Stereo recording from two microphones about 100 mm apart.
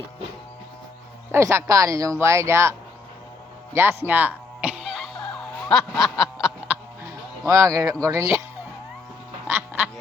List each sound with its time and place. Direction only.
1.3 s speech: 25° right (ahead or behind)
3.8 s music: 20° right (ahead or behind); by 5.5 s 5° left (ahead or behind)
5.7 s a sound: centre (ahead or behind)
6.7 s music: 20° right (ahead or behind)
8.0 s speech: 30° right (ahead or behind)
9.5 s quack: 20° right (ahead or behind)